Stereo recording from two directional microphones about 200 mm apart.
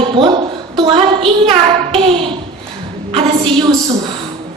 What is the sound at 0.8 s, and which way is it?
Speech, 25° right (ahead or behind).